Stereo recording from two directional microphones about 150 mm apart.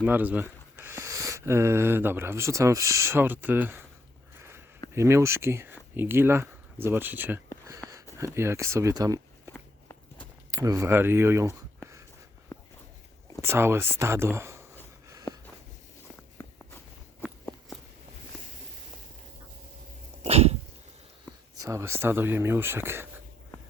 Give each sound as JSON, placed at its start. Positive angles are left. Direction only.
{"t": 0.0, "sound": "speech", "side_deg": -10}
{"t": 4.9, "sound": "speech", "side_deg": -20}
{"t": 7.7, "sound": "a sound", "side_deg": -25}
{"t": 8.2, "sound": "speech", "side_deg": -20}
{"t": 10.5, "sound": "speech", "side_deg": -25}
{"t": 13.4, "sound": "speech", "side_deg": -15}
{"t": 15.3, "sound": "a sound", "side_deg": 30}
{"t": 16.7, "sound": "walk", "side_deg": 15}
{"t": 20.2, "sound": "dog", "side_deg": -45}
{"t": 21.5, "sound": "speech", "side_deg": -20}